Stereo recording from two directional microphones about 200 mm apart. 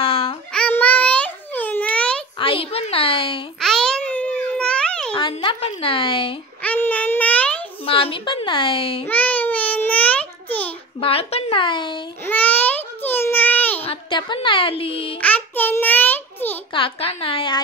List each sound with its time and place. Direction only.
0.0 s child singing: 30° left (ahead or behind)
0.5 s babbling: 5° left (ahead or behind)
2.3 s speech: 25° left (ahead or behind)
3.5 s babbling: centre (ahead or behind)
5.1 s speech: 25° left (ahead or behind)
6.6 s a sound: 10° left (ahead or behind)
7.8 s speech: 25° left (ahead or behind)
9.0 s babbling: 10° left (ahead or behind)
11.0 s speech: 30° left (ahead or behind)
12.3 s a sound: 10° left (ahead or behind)
13.8 s a woman's voice: 25° left (ahead or behind)
15.1 s a sound: 10° left (ahead or behind)
16.7 s speech: 30° left (ahead or behind)